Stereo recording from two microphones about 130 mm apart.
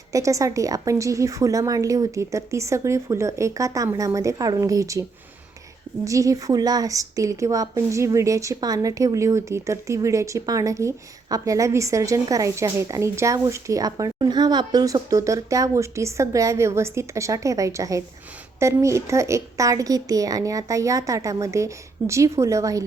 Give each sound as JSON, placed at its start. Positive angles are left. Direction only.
{"t": 0.1, "sound": "a woman's voice", "side_deg": -25}
{"t": 6.1, "sound": "a woman's voice", "side_deg": -25}